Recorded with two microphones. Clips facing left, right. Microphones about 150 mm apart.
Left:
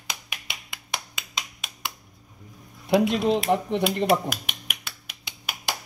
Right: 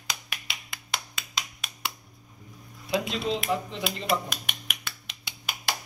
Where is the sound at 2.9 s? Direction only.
60° left (ahead or behind).